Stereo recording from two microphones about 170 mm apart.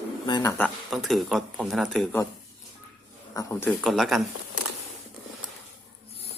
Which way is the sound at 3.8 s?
Centre (ahead or behind).